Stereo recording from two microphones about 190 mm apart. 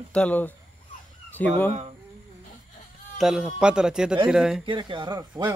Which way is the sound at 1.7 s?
35° right (ahead or behind).